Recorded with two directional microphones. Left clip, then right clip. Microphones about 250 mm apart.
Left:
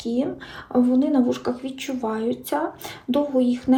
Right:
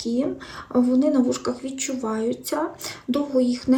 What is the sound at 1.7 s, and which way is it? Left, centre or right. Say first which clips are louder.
Speech: even; right.